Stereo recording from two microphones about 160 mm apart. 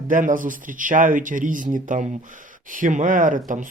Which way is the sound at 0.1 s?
55° right (ahead or behind).